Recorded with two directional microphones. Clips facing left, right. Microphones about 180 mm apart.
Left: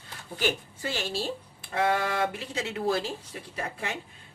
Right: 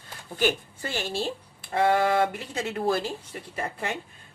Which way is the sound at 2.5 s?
50° right (ahead or behind).